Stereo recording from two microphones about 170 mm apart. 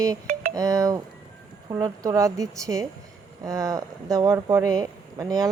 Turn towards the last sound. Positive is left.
turn(degrees=-20)  # may be behind; listen again after turning